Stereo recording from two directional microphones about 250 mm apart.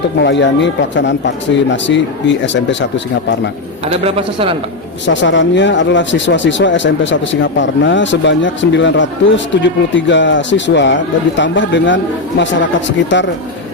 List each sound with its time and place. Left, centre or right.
0.2 s speech: left
4.0 s a man's voice: right
5.0 s speech: left